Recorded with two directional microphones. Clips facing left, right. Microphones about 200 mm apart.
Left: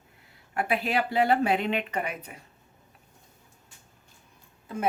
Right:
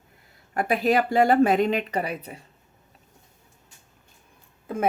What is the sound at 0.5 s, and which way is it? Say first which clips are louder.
A woman's voice: right 5 dB; 40° right (ahead or behind).